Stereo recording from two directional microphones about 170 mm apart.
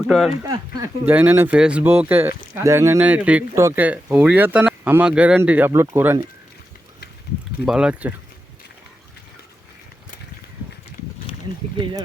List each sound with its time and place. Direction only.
0.1 s speech: centre (ahead or behind)
0.4 s speech: 20° right (ahead or behind)
1.0 s a man's voice: 10° right (ahead or behind)
7.6 s a man's voice: 5° right (ahead or behind)